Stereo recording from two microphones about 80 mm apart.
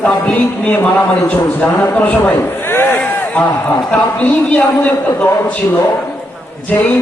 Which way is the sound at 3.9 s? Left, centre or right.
Centre.